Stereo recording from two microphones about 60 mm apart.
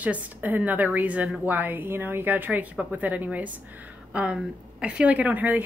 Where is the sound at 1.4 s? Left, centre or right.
Right.